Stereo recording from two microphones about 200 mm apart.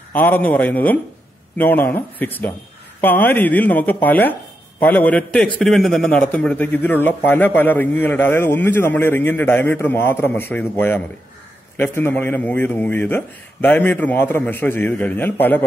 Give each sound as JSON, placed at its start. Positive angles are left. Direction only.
{"t": 0.1, "sound": "speech", "side_deg": 10}